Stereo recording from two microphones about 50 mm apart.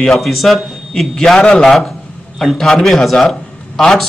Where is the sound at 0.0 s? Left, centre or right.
Centre.